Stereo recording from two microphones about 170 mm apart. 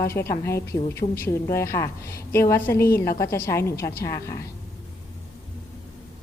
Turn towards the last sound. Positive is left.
turn(degrees=20)  # may be behind; listen again after turning